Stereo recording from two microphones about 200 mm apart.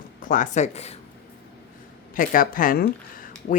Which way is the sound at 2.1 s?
45° left (ahead or behind).